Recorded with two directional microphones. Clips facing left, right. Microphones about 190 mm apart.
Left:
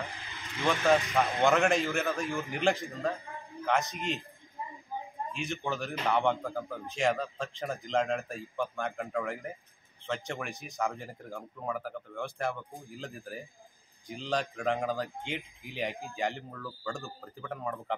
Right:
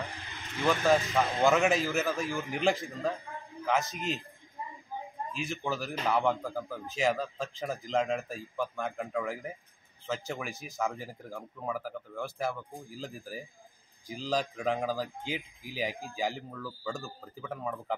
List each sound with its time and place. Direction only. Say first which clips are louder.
0.6 s speech: even; centre (ahead or behind)
5.3 s speech: right 1 dB; centre (ahead or behind)